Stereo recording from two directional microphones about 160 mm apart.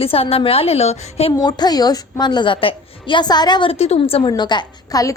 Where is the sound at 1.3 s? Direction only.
25° left (ahead or behind).